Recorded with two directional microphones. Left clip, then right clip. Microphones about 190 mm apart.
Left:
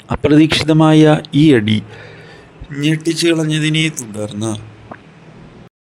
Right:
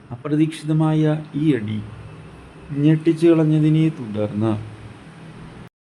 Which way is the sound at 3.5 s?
55° left (ahead or behind).